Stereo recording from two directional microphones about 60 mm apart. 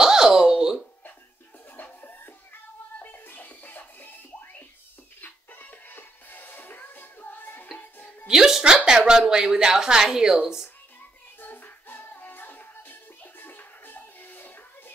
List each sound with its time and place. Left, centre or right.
0.0 s a sound: centre
1.7 s music: left
8.3 s a woman's voice: centre
11.3 s music: left